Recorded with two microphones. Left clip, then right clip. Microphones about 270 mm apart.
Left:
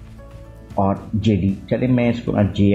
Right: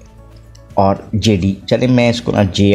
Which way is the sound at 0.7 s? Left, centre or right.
Right.